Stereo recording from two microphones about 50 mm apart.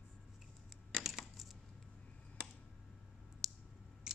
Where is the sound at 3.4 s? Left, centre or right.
Centre.